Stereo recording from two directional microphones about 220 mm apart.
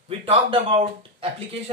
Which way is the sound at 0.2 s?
25° right (ahead or behind).